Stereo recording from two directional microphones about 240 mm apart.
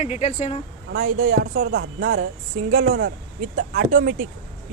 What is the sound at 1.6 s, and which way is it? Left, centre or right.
Speech, right.